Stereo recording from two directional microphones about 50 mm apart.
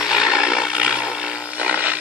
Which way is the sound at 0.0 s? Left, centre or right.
Centre.